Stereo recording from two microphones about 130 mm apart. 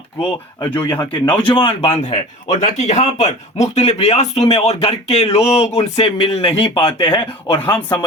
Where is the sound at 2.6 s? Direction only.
60° left (ahead or behind); by 8.0 s 35° left (ahead or behind).